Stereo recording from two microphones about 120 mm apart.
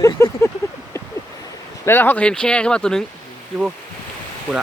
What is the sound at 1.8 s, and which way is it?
Speech, 20° left (ahead or behind).